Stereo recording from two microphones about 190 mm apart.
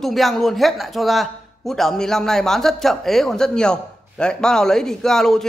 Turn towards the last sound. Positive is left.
turn(degrees=0)  # may be behind; listen again after turning